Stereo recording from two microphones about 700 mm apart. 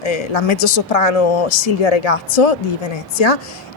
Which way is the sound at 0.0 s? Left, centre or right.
Left.